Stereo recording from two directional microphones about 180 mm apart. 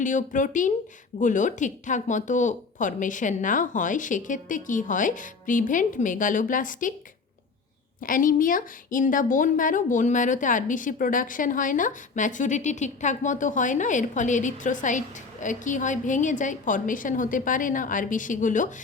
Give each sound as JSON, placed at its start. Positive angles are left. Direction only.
{"t": 0.0, "sound": "a woman's voice", "side_deg": 45}
{"t": 8.0, "sound": "a woman's voice", "side_deg": 50}